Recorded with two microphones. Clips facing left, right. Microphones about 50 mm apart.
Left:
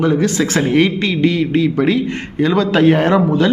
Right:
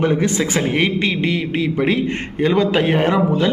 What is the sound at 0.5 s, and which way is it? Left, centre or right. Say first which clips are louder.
A man's voice: left 6 dB; centre.